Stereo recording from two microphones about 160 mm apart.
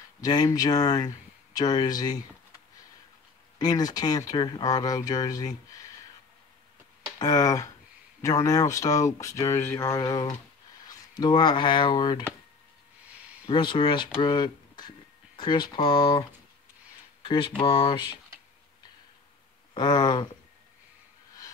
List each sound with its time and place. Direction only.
0.2 s speech: 25° left (ahead or behind)
3.5 s speech: 25° left (ahead or behind)
7.2 s speech: 25° left (ahead or behind)
13.5 s speech: 30° left (ahead or behind)
17.2 s a sound: 30° left (ahead or behind)
17.6 s speech: 35° left (ahead or behind)
19.7 s speech: 25° left (ahead or behind)